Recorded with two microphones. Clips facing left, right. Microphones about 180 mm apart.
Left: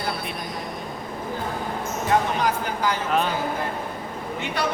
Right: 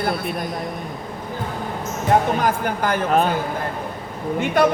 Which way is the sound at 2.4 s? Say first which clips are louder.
Right 3 dB; 50° right (ahead or behind).